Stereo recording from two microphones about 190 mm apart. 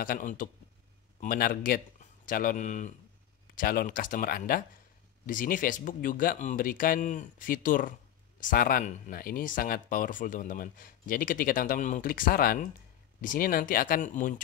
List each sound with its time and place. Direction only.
0.0 s speech: 45° left (ahead or behind)